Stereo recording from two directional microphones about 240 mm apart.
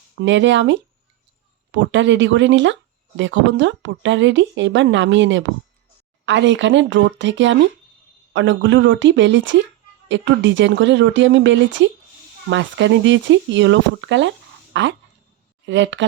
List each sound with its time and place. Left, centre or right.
0.2 s speech: right